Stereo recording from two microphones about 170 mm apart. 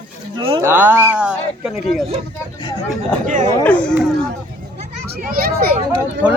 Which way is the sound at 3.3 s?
45° right (ahead or behind).